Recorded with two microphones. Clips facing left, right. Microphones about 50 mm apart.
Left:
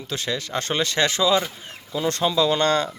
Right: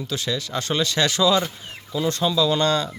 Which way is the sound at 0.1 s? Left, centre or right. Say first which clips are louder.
Left 1 dB; left.